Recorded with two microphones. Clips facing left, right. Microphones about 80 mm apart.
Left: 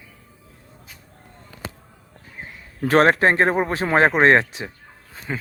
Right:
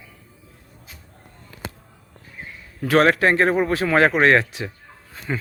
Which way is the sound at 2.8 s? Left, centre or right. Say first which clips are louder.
Left 1 dB; left.